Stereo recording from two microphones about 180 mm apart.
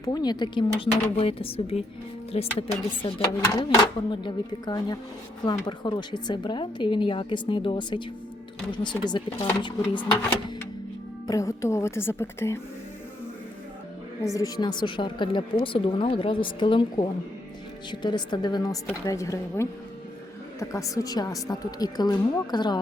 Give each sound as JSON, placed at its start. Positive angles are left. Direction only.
{"t": 0.0, "sound": "a woman's voice", "side_deg": 25}
{"t": 3.4, "sound": "a woman's voice", "side_deg": 20}
{"t": 10.0, "sound": "speech", "side_deg": 10}
{"t": 14.3, "sound": "a woman's voice", "side_deg": 20}